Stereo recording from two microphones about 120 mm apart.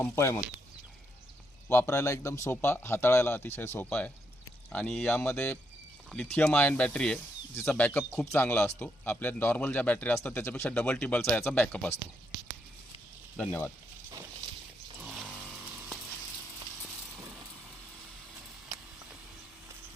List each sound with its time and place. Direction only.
0.0 s speech: 20° left (ahead or behind)
1.7 s speech: 20° left (ahead or behind)
13.5 s speech: 20° left (ahead or behind)
15.0 s a sound: 5° right (ahead or behind)